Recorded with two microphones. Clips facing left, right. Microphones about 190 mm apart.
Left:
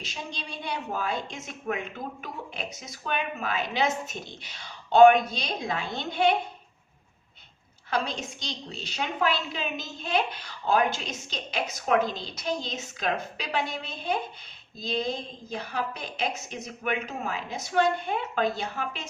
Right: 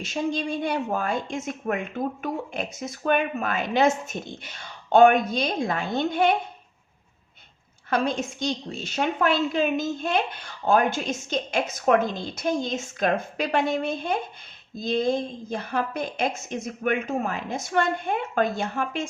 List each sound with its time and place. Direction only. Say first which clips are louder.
0.0 s speech: right 12 dB; 50° right (ahead or behind)
7.9 s speech: right 5 dB; 50° right (ahead or behind)